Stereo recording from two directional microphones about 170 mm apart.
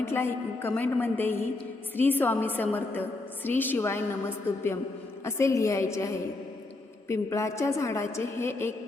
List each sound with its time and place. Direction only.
0.0 s a woman's voice: 15° left (ahead or behind)